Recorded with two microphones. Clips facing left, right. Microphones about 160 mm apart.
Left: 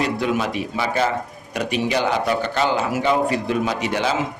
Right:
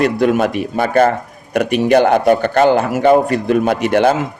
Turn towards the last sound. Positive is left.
turn(degrees=-55)  # may be behind; listen again after turning